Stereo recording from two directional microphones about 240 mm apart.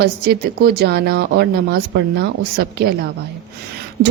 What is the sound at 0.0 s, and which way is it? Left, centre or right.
Speech, right.